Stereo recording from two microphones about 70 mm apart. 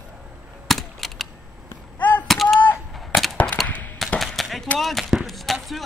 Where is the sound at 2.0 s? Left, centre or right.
Left.